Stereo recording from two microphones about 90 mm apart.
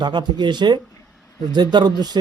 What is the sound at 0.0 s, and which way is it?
Speech, 55° right (ahead or behind).